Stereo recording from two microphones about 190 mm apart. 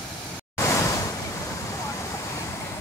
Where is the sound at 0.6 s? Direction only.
15° left (ahead or behind).